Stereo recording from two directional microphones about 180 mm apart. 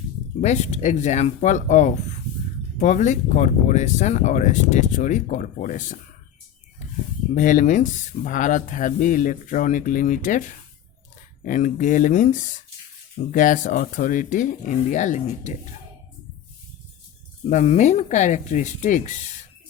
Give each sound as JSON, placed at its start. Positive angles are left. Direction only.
{"t": 0.4, "sound": "speech", "side_deg": 40}
{"t": 7.3, "sound": "speech", "side_deg": 45}
{"t": 17.5, "sound": "speech", "side_deg": 40}